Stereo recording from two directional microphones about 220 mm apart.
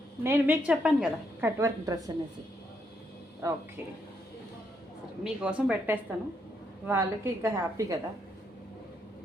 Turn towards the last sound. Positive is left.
turn(degrees=-15)  # may be behind; listen again after turning